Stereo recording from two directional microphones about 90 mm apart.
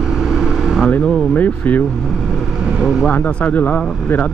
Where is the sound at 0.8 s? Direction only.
20° left (ahead or behind).